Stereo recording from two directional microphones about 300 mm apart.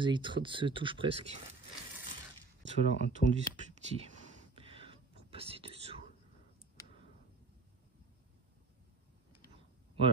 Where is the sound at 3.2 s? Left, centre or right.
Left.